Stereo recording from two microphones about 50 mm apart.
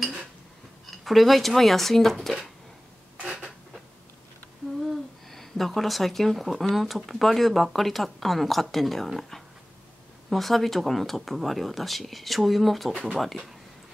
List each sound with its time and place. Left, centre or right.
0.8 s speech: centre
3.2 s a sound: right
5.3 s speech: centre